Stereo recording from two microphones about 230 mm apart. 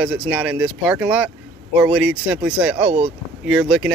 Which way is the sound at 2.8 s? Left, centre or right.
Right.